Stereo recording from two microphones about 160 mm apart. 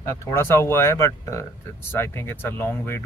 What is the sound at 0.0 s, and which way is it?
Speech, 20° left (ahead or behind).